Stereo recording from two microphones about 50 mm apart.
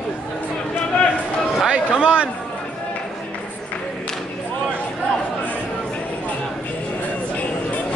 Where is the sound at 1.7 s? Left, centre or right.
Centre.